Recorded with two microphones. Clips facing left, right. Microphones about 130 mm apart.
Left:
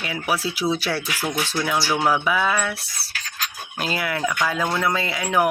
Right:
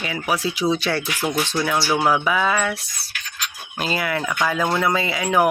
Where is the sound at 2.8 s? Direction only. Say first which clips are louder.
Left 1 dB; 35° left (ahead or behind).